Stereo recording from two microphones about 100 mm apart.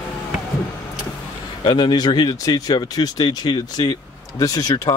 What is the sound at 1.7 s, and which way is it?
Speech, 50° left (ahead or behind).